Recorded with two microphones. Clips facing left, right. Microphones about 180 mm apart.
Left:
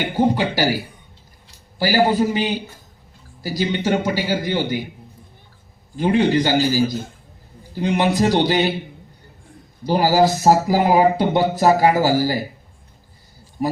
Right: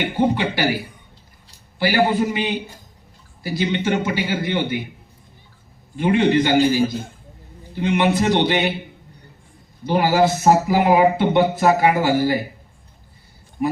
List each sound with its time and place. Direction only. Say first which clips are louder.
0.2 s speech: left 2 dB; 40° left (ahead or behind)
1.8 s speech: left 1 dB; 35° left (ahead or behind)
6.0 s speech: even; 35° left (ahead or behind)
9.8 s speech: left 1 dB; 35° left (ahead or behind)
13.6 s speech: right 1 dB; 40° left (ahead or behind)